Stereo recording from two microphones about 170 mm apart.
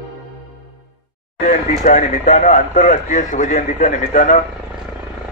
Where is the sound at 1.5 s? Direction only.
45° left (ahead or behind).